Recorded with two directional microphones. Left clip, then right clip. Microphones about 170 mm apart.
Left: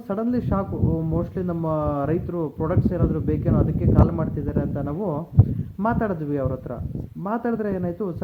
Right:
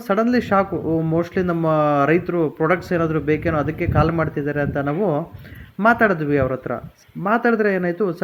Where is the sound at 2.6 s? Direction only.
10° right (ahead or behind).